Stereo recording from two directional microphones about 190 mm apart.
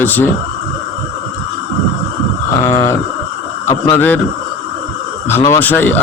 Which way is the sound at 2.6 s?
15° left (ahead or behind).